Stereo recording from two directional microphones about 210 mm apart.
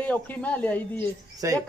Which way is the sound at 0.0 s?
10° left (ahead or behind).